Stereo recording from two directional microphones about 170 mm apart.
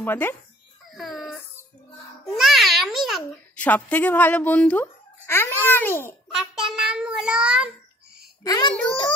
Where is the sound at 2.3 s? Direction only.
Centre (ahead or behind).